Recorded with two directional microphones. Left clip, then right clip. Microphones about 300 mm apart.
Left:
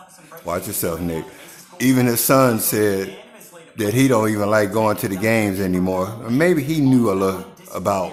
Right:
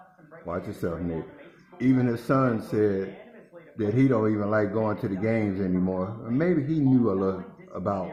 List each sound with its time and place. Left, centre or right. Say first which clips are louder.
0.4 s speech: left 8 dB; left